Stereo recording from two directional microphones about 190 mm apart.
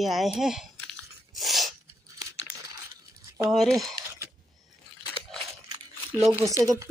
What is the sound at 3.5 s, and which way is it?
Speech, centre (ahead or behind).